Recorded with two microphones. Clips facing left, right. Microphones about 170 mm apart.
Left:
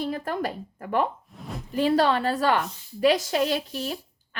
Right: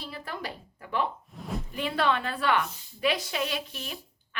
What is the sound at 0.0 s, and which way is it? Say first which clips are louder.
Speech: left 10 dB; 50° left (ahead or behind).